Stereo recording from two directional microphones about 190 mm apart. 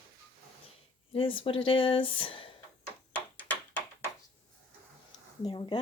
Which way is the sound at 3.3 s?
10° left (ahead or behind).